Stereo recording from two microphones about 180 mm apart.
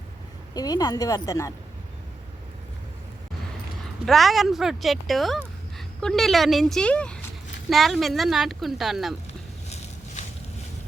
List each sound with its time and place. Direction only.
0.5 s a woman's voice: 20° left (ahead or behind)
4.0 s speech: centre (ahead or behind)
9.6 s a sound: 35° left (ahead or behind)